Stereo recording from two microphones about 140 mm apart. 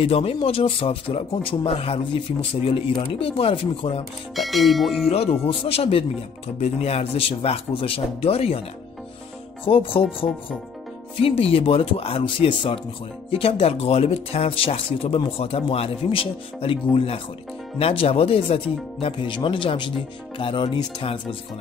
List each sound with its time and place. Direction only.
0.0 s speech: 45° left (ahead or behind)
4.4 s speech: centre (ahead or behind)
5.0 s speech: 45° left (ahead or behind)
9.7 s speech: 40° left (ahead or behind)
10.0 s speech: centre (ahead or behind)
11.2 s speech: 40° left (ahead or behind)